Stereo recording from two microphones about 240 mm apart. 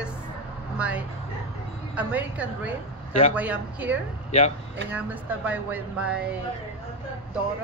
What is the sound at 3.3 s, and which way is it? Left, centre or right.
Speech, centre.